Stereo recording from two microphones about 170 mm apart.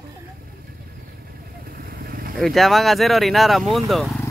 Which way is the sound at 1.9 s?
60° right (ahead or behind).